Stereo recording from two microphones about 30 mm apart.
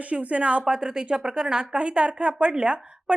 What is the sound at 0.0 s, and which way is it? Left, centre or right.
Speech, right.